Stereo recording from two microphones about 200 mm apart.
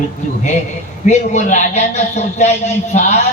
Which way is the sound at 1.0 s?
40° left (ahead or behind).